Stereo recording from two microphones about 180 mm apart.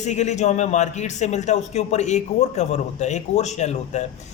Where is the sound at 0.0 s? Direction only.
40° left (ahead or behind).